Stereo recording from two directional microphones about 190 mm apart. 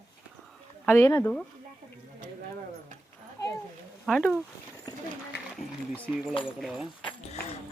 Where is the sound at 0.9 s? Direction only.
10° left (ahead or behind).